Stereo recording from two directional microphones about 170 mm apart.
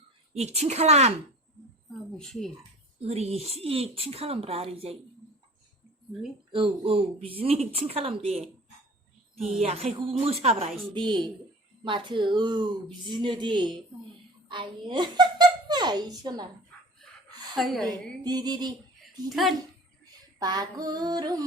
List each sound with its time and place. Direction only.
0.3 s speech: 40° right (ahead or behind)
1.9 s a woman's voice: centre (ahead or behind)
3.0 s speech: 35° right (ahead or behind)
6.5 s speech: 30° right (ahead or behind)
9.3 s a woman's voice: centre (ahead or behind)
9.6 s speech: 40° right (ahead or behind)
10.9 s female singing: 25° right (ahead or behind)
14.4 s a woman's voice: 30° right (ahead or behind)
17.5 s a woman's voice: centre (ahead or behind)
18.2 s female singing: 25° right (ahead or behind)
19.3 s a woman's voice: centre (ahead or behind)
20.4 s female singing: 25° right (ahead or behind)